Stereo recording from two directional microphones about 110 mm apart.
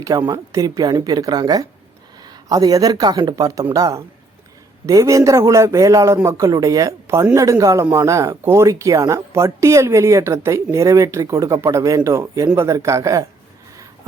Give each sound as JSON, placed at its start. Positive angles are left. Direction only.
{"t": 0.0, "sound": "speech", "side_deg": -30}